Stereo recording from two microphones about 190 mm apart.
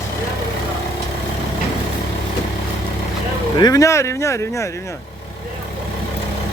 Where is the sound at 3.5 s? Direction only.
20° left (ahead or behind).